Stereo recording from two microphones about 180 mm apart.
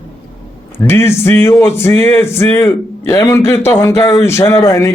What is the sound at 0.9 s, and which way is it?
Speech, 15° left (ahead or behind).